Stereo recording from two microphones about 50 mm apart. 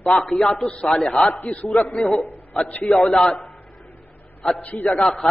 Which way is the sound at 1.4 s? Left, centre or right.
Left.